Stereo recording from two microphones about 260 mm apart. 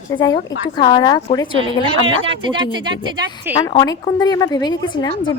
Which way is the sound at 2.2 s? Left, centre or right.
Centre.